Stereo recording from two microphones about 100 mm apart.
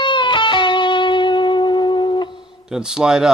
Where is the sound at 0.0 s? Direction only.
55° left (ahead or behind).